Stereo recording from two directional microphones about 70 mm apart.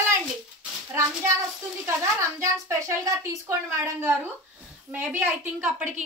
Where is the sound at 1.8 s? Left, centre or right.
Right.